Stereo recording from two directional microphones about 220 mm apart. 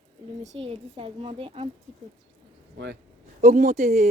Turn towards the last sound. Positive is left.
turn(degrees=-30)  # may be behind; listen again after turning